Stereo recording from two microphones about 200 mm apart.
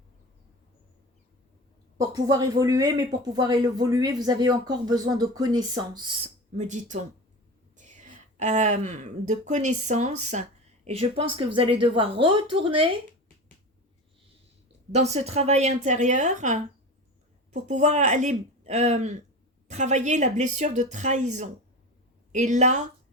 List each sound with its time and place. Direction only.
2.0 s speech: 15° right (ahead or behind)
6.6 s a woman's voice: 35° right (ahead or behind)
14.9 s speech: 35° right (ahead or behind)